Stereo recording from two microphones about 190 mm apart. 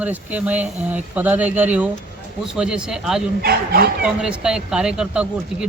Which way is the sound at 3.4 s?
55° right (ahead or behind).